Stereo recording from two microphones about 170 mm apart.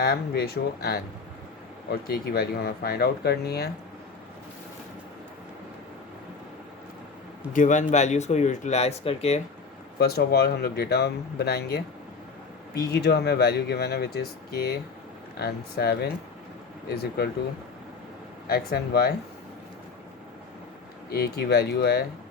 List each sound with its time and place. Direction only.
0.0 s speech: 65° left (ahead or behind)
7.5 s speech: 50° left (ahead or behind)
10.0 s speech: 70° left (ahead or behind)
12.9 s speech: 75° left (ahead or behind)
18.4 s speech: 65° left (ahead or behind)
21.1 s speech: 65° left (ahead or behind)